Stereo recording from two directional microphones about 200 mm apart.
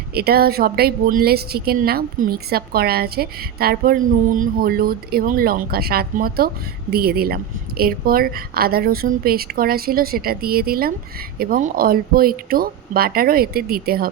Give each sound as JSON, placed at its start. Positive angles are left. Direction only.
{"t": 0.1, "sound": "a woman's voice", "side_deg": -50}